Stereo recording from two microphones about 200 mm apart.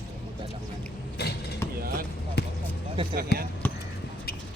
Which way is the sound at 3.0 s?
25° right (ahead or behind).